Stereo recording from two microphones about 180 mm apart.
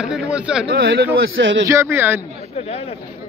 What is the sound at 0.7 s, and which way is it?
Speech, 90° right.